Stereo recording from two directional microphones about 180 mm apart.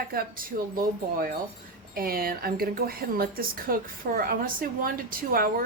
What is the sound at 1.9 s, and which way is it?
A woman's voice, 55° right (ahead or behind).